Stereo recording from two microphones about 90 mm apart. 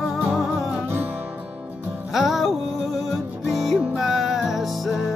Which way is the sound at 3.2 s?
20° right (ahead or behind).